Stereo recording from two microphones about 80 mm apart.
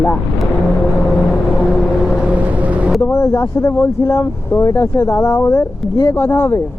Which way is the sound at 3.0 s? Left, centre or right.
Left.